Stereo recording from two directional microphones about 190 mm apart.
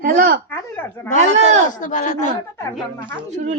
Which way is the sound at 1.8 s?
40° left (ahead or behind).